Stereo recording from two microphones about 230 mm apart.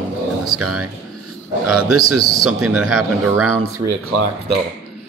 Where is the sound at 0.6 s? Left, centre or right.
Right.